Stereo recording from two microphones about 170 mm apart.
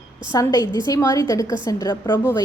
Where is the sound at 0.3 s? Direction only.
20° left (ahead or behind).